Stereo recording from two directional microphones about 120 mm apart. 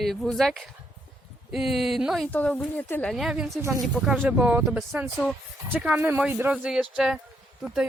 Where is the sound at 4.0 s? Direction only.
10° right (ahead or behind).